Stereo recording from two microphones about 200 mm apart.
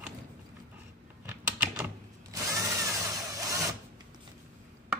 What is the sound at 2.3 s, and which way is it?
Drill, 15° right (ahead or behind).